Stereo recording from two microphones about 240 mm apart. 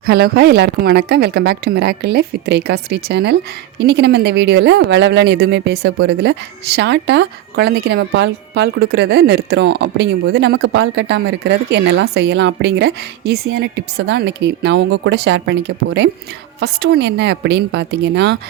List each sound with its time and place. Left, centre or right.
0.0 s speech: right